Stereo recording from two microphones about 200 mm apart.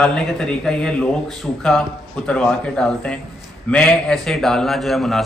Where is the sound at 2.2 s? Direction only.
5° left (ahead or behind).